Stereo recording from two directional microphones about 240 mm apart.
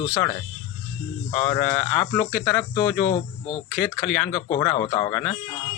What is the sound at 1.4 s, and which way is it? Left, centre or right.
Speech, centre.